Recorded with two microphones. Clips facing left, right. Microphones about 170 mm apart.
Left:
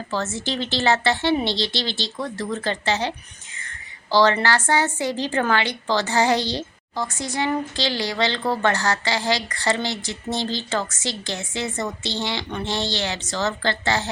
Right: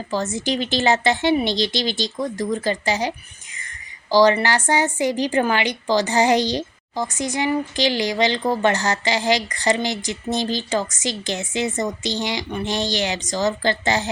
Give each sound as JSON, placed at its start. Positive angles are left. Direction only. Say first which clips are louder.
{"t": 0.1, "sound": "a woman's voice", "louder": "right 4 dB", "side_deg": -15}